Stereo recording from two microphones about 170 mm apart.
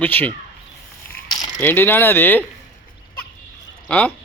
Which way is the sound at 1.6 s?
10° left (ahead or behind).